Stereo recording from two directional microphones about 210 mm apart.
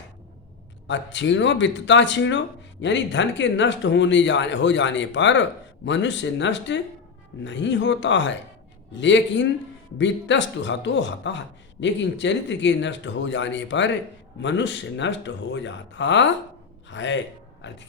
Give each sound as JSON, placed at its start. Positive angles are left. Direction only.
{"t": 0.9, "sound": "speech", "side_deg": 60}